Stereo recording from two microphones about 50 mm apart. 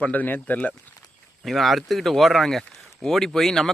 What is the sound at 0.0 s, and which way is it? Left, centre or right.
Speech, left.